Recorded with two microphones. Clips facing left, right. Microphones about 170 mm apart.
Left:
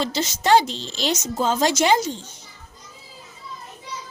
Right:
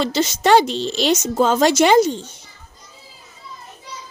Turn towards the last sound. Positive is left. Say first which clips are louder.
# right 6 dB
turn(degrees=-65)  # may be behind; listen again after turning